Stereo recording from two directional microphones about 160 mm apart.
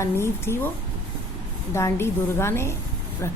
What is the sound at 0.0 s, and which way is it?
Speech, 15° left (ahead or behind).